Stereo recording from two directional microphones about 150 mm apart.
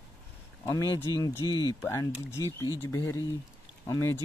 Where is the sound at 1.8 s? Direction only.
15° left (ahead or behind).